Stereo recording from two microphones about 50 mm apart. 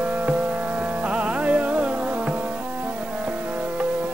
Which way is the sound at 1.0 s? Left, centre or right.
Right.